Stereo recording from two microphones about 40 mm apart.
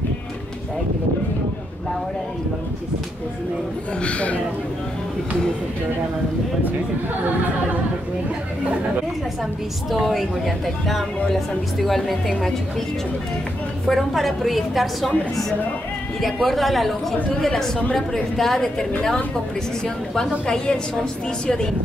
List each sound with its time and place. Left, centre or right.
4.0 s speech: left
9.8 s speech: centre
13.8 s speech: centre
16.2 s a woman's voice: centre